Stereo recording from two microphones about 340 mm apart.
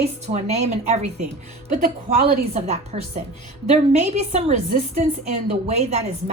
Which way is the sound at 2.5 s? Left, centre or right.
Centre.